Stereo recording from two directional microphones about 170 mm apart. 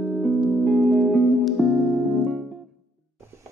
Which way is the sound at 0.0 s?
Centre (ahead or behind).